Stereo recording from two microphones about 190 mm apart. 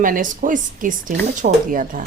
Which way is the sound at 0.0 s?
45° right (ahead or behind).